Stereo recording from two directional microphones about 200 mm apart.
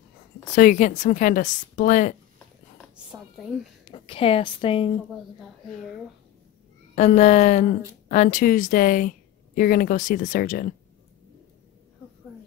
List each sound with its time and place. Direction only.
0.6 s speech: 40° left (ahead or behind)
3.8 s speech: 25° left (ahead or behind)
7.0 s speech: 35° left (ahead or behind)